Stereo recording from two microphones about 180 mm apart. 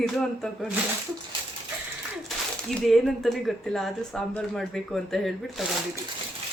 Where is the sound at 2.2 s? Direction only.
Centre (ahead or behind).